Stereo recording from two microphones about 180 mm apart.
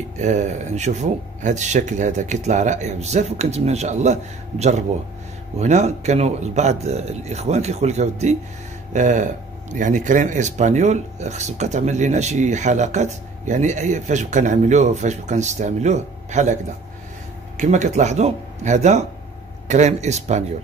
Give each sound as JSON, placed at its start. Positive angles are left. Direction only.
{"t": 0.2, "sound": "speech", "side_deg": -40}
{"t": 17.6, "sound": "speech", "side_deg": -40}